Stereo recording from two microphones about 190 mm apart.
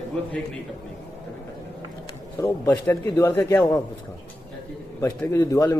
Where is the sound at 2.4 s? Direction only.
10° left (ahead or behind).